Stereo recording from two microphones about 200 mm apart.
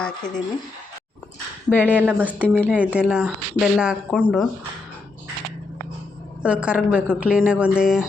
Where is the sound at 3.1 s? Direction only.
5° right (ahead or behind).